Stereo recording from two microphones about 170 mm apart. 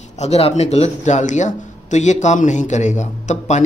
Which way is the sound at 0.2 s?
35° left (ahead or behind).